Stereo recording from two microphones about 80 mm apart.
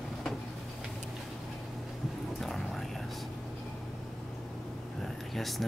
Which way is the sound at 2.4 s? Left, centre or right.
Centre.